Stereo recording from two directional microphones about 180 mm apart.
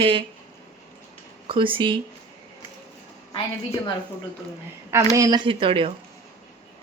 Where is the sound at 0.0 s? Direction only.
30° right (ahead or behind).